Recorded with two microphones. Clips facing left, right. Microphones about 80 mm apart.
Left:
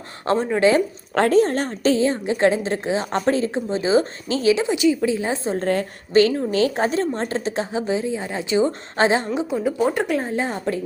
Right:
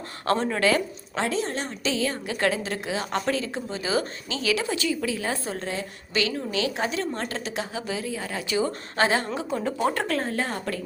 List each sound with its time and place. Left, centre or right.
0.3 s a woman's voice: centre
1.1 s a woman's voice: left
2.0 s a woman's voice: left
5.5 s a woman's voice: left
9.5 s speech: centre